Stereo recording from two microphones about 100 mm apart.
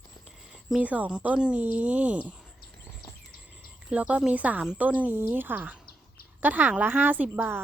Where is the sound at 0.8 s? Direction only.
15° right (ahead or behind).